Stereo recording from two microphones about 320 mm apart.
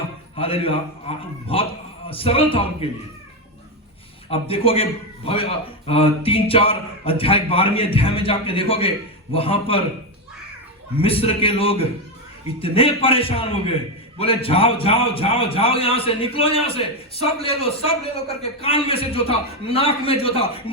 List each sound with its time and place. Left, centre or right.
0.3 s a man's voice: centre
4.3 s a man's voice: centre
10.9 s a man's voice: centre